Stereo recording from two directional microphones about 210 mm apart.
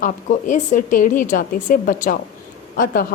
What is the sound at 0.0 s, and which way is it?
A woman's voice, 35° left (ahead or behind).